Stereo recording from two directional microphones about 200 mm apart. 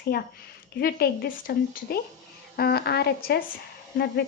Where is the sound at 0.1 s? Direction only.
45° left (ahead or behind).